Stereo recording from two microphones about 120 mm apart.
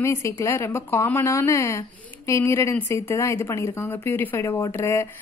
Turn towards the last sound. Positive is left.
turn(degrees=20)  # may be behind; listen again after turning